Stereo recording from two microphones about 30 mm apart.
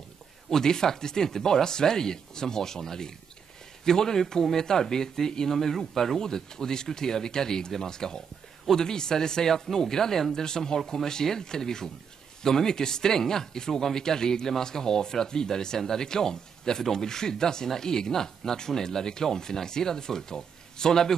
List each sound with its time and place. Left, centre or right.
0.5 s speech: left